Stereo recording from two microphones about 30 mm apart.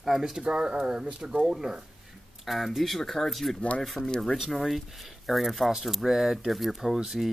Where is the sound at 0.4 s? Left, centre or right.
Right.